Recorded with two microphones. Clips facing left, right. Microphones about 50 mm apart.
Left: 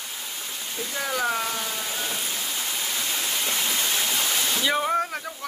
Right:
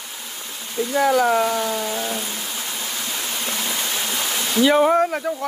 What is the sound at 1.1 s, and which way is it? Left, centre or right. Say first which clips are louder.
Speech: right 6 dB; centre.